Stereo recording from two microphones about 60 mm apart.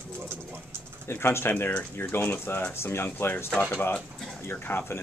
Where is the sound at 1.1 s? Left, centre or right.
Left.